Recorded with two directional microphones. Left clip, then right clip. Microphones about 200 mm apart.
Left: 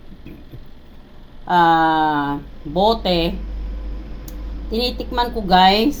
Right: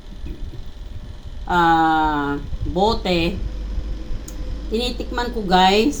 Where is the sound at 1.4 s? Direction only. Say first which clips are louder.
Left 2 dB; 10° left (ahead or behind).